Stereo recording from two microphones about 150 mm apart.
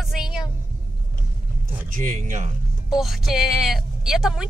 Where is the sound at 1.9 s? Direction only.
65° right (ahead or behind).